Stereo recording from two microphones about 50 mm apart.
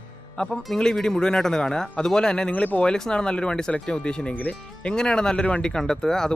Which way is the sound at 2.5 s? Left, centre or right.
Left.